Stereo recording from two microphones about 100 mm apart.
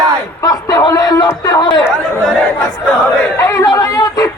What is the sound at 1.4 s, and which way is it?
Chatter, 45° left (ahead or behind).